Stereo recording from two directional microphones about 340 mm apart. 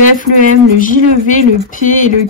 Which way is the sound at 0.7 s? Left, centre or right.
Left.